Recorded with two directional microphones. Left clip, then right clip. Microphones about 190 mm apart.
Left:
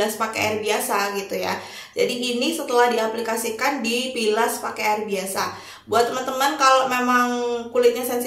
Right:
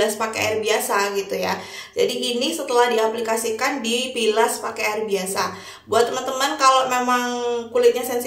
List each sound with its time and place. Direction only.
0.0 s a woman's voice: 10° right (ahead or behind)